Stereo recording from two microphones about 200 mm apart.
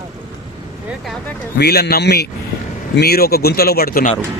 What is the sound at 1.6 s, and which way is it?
Speech, 55° left (ahead or behind).